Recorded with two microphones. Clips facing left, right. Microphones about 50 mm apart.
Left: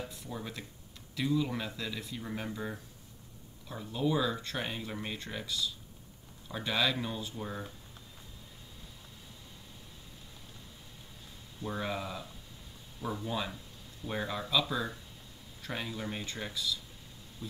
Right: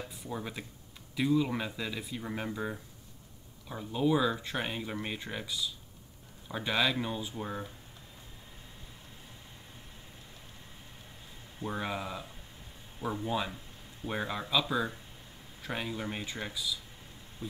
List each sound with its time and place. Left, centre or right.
0.2 s speech: centre
11.6 s speech: centre
13.0 s speech: right; by 16.8 s centre
17.4 s a sound: right